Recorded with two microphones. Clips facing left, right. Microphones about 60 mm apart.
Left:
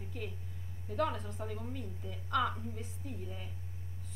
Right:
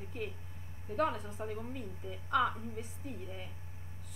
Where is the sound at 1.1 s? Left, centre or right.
Centre.